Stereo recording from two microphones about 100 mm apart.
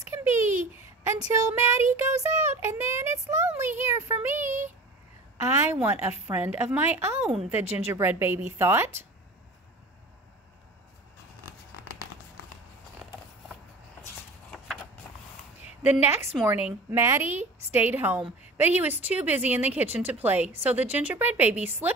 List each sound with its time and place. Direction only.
0.1 s a sound: 25° right (ahead or behind)
1.1 s speech: 35° right (ahead or behind)
5.6 s speech: 20° right (ahead or behind)
15.9 s speech: 20° right (ahead or behind)
16.9 s speech: 25° right (ahead or behind)